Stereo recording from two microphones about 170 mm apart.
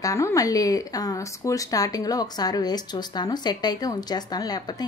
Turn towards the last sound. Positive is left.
turn(degrees=25)  # may be behind; listen again after turning